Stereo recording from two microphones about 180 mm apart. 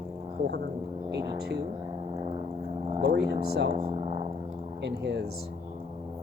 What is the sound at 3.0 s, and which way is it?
Speech, 60° right (ahead or behind).